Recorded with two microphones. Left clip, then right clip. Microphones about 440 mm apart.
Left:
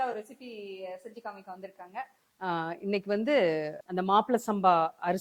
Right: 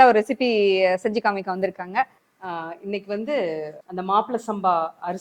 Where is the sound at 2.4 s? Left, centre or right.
Left.